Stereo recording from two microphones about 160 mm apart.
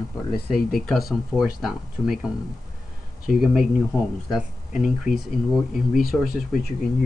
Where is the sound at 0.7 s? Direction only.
Centre (ahead or behind).